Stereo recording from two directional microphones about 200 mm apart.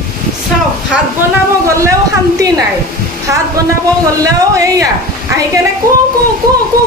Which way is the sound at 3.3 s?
15° right (ahead or behind).